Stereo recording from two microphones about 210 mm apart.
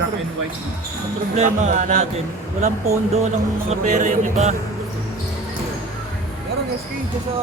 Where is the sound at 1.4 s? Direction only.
35° right (ahead or behind).